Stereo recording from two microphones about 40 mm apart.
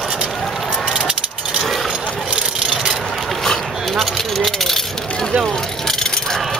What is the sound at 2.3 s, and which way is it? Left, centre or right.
Vehicle, centre.